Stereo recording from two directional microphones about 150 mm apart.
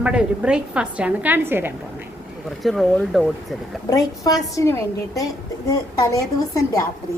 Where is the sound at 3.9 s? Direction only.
25° left (ahead or behind).